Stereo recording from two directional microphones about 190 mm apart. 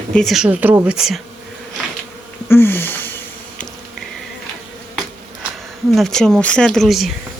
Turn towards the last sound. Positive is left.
turn(degrees=0)  # may be behind; listen again after turning